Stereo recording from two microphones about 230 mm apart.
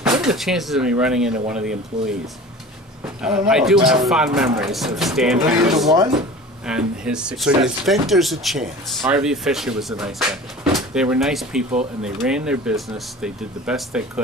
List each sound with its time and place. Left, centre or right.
0.2 s speech: centre
3.2 s speech: centre
5.9 s speech: centre
6.6 s speech: centre